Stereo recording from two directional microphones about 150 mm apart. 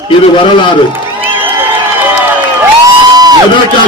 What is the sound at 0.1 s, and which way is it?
Speech, 35° left (ahead or behind).